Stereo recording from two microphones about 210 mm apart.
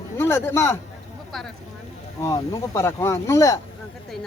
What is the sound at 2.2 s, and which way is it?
Speech, 15° left (ahead or behind).